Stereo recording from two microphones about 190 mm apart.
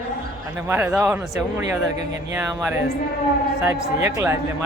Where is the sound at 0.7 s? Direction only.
10° right (ahead or behind).